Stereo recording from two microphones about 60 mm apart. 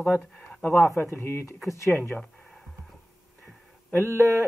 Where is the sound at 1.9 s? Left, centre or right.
Left.